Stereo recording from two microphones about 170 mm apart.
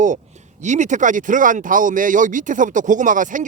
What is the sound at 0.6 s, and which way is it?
Speech, 45° right (ahead or behind).